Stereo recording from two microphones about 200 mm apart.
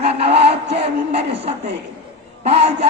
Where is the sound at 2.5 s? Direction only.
30° right (ahead or behind).